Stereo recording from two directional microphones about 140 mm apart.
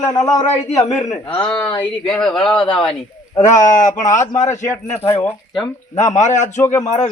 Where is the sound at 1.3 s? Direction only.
40° left (ahead or behind).